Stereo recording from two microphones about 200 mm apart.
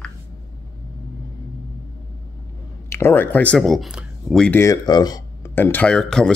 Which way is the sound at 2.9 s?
10° left (ahead or behind).